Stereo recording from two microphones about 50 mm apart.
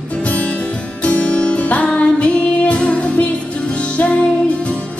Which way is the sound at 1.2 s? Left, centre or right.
Left.